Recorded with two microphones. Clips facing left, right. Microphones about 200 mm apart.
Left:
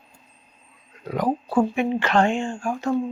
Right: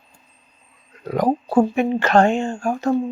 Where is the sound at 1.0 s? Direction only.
45° right (ahead or behind).